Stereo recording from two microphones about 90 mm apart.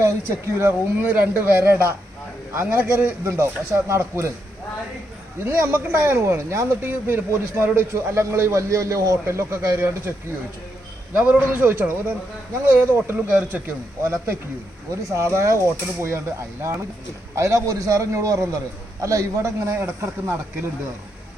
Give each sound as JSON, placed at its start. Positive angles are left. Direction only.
{"t": 0.0, "sound": "speech", "side_deg": -30}
{"t": 3.2, "sound": "speech", "side_deg": -30}
{"t": 5.4, "sound": "speech", "side_deg": -25}
{"t": 11.3, "sound": "speech", "side_deg": -20}